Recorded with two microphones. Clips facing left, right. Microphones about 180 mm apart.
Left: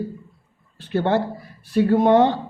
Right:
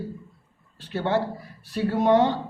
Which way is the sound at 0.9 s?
55° left (ahead or behind).